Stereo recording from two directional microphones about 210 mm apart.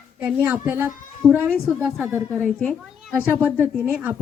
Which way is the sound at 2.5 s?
Centre (ahead or behind).